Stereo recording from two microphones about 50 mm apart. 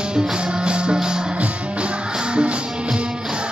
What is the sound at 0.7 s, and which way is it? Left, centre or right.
Music, centre.